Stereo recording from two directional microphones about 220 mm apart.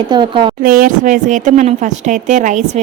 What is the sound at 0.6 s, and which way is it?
Speech, 40° right (ahead or behind).